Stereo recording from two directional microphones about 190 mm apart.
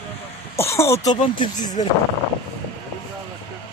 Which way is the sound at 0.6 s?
15° left (ahead or behind).